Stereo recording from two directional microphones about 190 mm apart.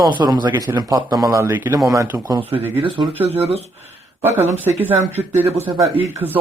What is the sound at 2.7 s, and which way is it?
Speech, 30° right (ahead or behind).